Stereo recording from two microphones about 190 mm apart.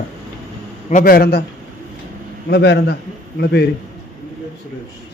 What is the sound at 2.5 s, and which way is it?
A man's voice, 60° left (ahead or behind).